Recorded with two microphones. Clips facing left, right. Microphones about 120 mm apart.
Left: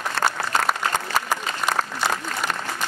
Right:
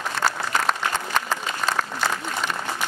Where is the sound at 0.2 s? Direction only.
70° left (ahead or behind).